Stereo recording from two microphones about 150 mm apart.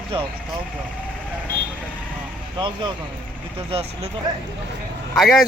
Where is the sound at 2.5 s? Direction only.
35° right (ahead or behind).